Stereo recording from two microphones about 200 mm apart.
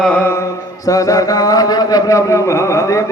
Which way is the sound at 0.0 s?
5° left (ahead or behind).